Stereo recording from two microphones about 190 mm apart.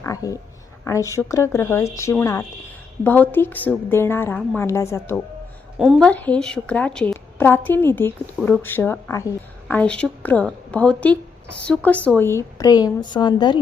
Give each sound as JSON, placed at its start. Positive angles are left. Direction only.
{"t": 0.0, "sound": "a woman's voice", "side_deg": 15}
{"t": 5.8, "sound": "a woman's voice", "side_deg": 0}